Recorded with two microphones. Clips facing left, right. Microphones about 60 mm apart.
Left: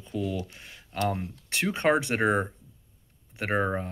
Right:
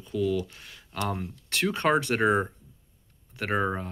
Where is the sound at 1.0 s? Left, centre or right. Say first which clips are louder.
Left 2 dB; centre.